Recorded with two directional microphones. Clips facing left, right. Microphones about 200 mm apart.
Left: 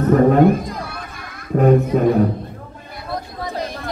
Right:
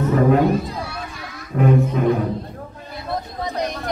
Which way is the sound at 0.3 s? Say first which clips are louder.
Left 3 dB; 50° left (ahead or behind).